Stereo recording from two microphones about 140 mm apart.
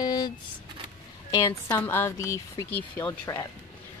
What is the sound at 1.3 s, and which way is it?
Speech, 25° left (ahead or behind).